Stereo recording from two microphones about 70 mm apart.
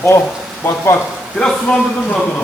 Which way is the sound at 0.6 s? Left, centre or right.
Left.